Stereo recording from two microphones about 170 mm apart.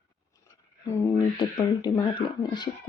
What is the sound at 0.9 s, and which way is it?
Speech, 15° left (ahead or behind).